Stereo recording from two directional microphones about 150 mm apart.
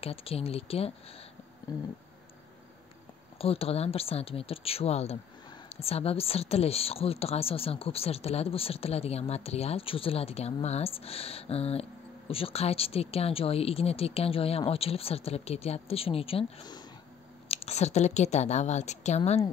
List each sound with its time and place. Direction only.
0.0 s speech: 40° left (ahead or behind)
1.7 s a sound: 25° left (ahead or behind)
3.3 s a woman's voice: 40° left (ahead or behind)